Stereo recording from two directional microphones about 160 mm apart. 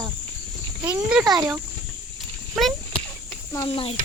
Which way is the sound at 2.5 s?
Centre (ahead or behind).